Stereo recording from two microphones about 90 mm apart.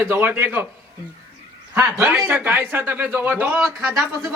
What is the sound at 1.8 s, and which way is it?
Speech, 35° right (ahead or behind).